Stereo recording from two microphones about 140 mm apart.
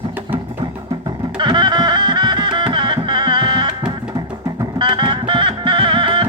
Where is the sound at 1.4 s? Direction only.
35° right (ahead or behind).